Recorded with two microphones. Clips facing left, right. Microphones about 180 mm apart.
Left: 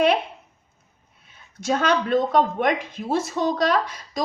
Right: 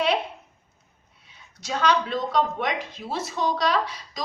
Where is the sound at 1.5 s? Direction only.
50° left (ahead or behind).